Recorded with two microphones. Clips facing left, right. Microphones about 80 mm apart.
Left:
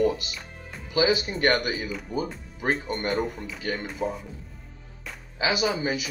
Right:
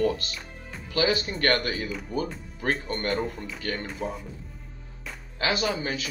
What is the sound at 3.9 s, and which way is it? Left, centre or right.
Speech, centre.